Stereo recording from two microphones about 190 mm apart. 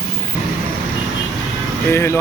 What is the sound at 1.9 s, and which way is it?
Speech, 10° left (ahead or behind).